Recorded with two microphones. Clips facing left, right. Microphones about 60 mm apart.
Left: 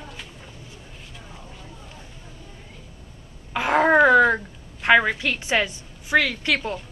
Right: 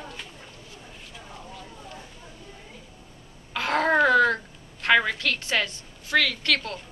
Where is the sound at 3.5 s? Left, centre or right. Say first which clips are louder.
Left 5 dB; centre.